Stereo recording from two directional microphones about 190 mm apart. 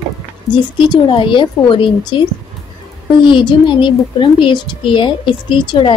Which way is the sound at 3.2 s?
25° left (ahead or behind).